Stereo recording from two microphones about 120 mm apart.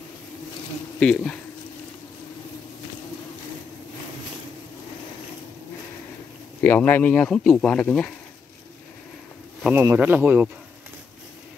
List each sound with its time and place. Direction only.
0.9 s speech: 10° left (ahead or behind)
6.6 s speech: 15° left (ahead or behind)
9.8 s speech: 15° right (ahead or behind)